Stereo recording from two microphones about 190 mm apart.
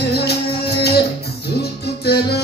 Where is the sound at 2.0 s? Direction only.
60° left (ahead or behind).